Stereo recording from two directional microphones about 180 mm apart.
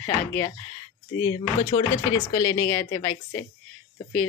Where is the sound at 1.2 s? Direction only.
20° left (ahead or behind).